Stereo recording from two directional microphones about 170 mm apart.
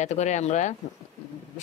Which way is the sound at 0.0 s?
45° left (ahead or behind).